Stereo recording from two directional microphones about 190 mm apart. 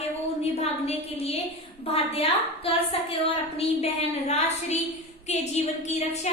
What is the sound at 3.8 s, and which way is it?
A woman's voice, 35° left (ahead or behind).